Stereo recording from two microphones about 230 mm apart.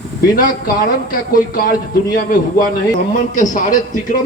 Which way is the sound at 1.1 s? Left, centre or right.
Left.